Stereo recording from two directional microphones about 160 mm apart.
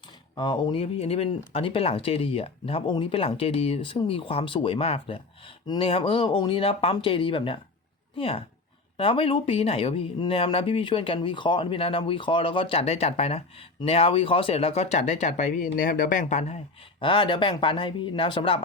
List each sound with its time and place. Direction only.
0.3 s speech: 30° left (ahead or behind); by 16.6 s 45° left (ahead or behind)
17.0 s speech: 30° left (ahead or behind)